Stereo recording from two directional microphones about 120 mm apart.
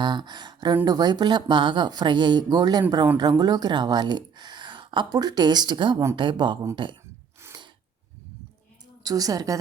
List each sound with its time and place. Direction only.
0.0 s speech: 35° right (ahead or behind)
7.4 s a sound: 20° right (ahead or behind)
9.0 s speech: 30° right (ahead or behind)